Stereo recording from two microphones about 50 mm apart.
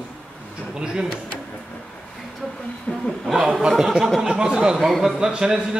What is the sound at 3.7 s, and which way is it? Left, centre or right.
Speech, centre.